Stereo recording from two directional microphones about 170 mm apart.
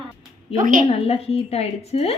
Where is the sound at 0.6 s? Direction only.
50° right (ahead or behind).